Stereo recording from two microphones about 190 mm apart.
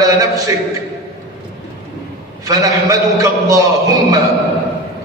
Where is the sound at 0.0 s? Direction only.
15° right (ahead or behind).